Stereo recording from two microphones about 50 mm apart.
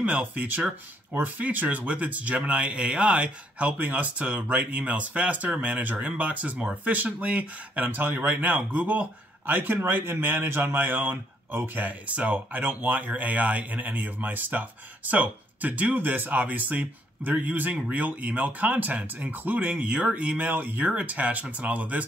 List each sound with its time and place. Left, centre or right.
0.0 s speech: right